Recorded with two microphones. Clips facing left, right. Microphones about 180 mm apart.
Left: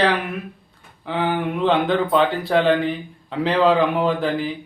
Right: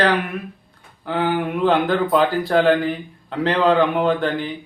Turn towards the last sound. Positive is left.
turn(degrees=0)  # may be behind; listen again after turning